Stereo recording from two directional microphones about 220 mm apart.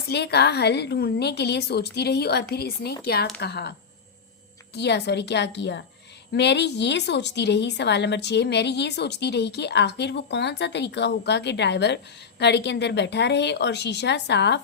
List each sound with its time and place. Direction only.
0.1 s a woman's voice: 50° left (ahead or behind)
4.7 s a woman's voice: 50° left (ahead or behind)